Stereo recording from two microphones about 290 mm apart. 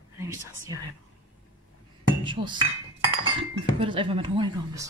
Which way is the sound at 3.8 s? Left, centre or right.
Centre.